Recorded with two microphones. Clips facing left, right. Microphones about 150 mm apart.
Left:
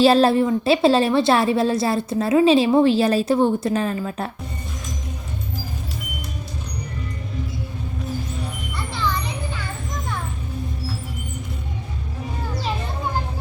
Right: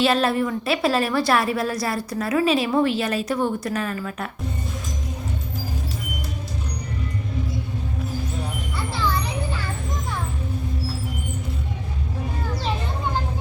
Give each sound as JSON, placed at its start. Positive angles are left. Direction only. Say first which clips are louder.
{"t": 0.0, "sound": "a woman's voice", "louder": "left 5 dB", "side_deg": 30}